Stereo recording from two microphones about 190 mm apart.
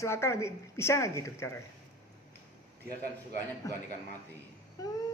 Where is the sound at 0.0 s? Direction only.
15° left (ahead or behind).